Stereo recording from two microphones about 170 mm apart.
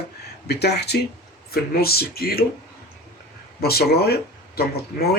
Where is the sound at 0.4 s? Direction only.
70° left (ahead or behind).